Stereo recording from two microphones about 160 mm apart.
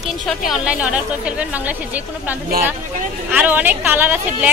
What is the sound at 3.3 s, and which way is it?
A woman's voice, 10° right (ahead or behind).